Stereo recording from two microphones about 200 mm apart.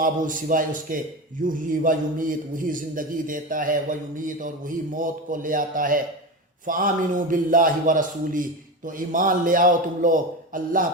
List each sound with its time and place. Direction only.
0.0 s a man's voice: 45° right (ahead or behind)